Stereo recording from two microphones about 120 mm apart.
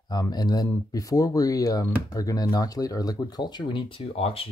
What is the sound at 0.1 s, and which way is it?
Speech, 35° left (ahead or behind).